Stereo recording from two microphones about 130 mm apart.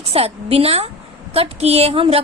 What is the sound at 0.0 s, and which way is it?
A woman's voice, 50° right (ahead or behind).